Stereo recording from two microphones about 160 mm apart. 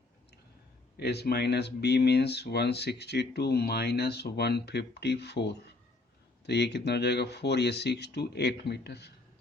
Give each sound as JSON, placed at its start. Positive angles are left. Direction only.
{"t": 0.9, "sound": "speech", "side_deg": 90}